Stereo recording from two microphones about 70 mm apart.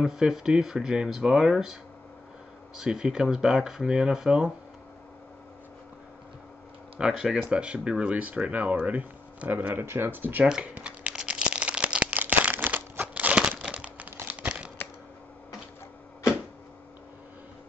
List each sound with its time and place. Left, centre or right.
0.0 s speech: centre
7.0 s speech: centre
10.5 s crumpling: centre
14.4 s a sound: centre